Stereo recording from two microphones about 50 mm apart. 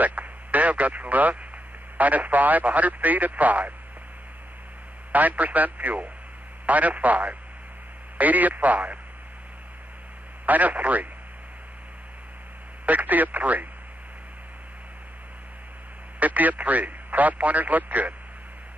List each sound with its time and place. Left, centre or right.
0.0 s speech: right
5.1 s speech: right
10.4 s speech: right
12.8 s speech: right
16.2 s speech: right